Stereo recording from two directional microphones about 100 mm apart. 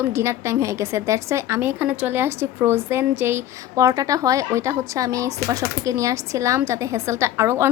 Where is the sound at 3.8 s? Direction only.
35° right (ahead or behind).